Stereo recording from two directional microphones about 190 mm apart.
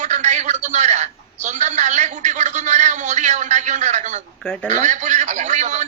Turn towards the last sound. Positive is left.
turn(degrees=-40)  # may be behind; listen again after turning